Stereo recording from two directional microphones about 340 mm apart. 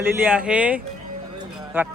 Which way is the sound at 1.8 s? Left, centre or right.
Centre.